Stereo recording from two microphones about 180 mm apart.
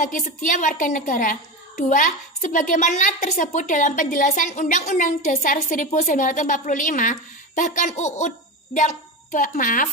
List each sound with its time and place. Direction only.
0.0 s a woman's voice: 45° left (ahead or behind)
9.3 s a woman's voice: 45° left (ahead or behind)